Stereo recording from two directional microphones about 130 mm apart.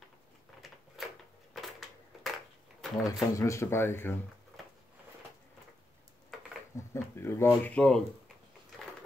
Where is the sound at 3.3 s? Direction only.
25° left (ahead or behind).